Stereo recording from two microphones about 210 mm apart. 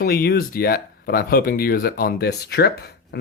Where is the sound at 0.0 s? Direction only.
45° left (ahead or behind).